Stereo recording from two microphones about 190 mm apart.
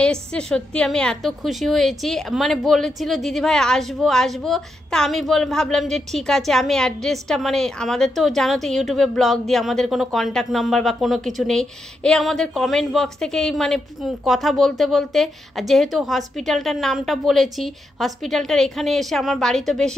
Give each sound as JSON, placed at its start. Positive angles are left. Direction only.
{"t": 0.0, "sound": "a woman's voice", "side_deg": 5}